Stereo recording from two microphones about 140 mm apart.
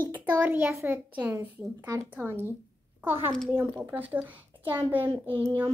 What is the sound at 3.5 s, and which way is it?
A child's voice, 10° right (ahead or behind).